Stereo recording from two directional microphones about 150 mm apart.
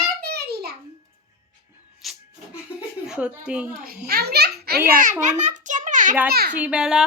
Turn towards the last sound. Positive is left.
turn(degrees=-5)  # may be behind; listen again after turning